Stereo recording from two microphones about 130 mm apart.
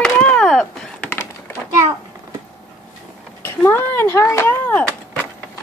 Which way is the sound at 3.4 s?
20° left (ahead or behind).